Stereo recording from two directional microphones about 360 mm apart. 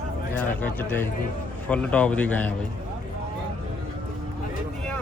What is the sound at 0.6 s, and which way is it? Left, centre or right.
Speech, centre.